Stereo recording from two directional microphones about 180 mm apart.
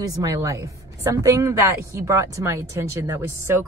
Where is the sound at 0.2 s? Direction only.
20° right (ahead or behind).